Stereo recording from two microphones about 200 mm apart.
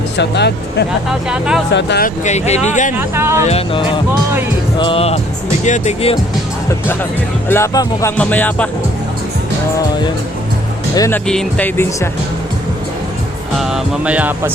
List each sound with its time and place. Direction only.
0.2 s speech: 55° left (ahead or behind)
1.3 s speech: 5° right (ahead or behind)
1.7 s speech: 60° left (ahead or behind)
2.0 s speech: 35° left (ahead or behind)
3.0 s music: 10° right (ahead or behind)
3.4 s speech: 30° left (ahead or behind)
4.1 s music: 10° right (ahead or behind)
4.8 s speech: 25° left (ahead or behind)
6.8 s speech: 10° left (ahead or behind)
10.9 s speech: 15° left (ahead or behind)
11.3 s speech: 5° left (ahead or behind)
13.6 s music: centre (ahead or behind)